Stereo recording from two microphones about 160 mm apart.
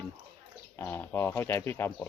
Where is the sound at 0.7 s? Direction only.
15° left (ahead or behind).